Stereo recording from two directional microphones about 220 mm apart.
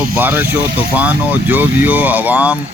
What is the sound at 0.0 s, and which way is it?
Speech, 10° right (ahead or behind).